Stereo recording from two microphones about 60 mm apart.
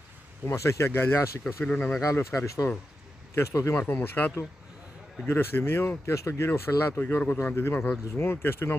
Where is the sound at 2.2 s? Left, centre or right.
Left.